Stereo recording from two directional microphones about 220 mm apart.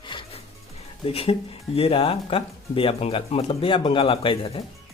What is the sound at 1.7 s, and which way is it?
Speech, 25° left (ahead or behind).